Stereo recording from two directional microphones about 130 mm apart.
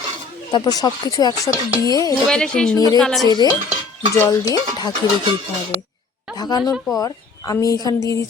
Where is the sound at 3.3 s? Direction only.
35° left (ahead or behind).